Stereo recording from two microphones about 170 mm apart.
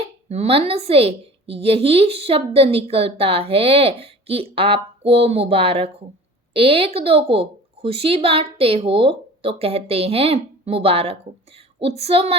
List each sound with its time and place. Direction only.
0.3 s a woman's voice: 35° right (ahead or behind)